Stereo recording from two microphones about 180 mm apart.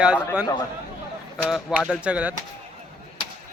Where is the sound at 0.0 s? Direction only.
5° right (ahead or behind).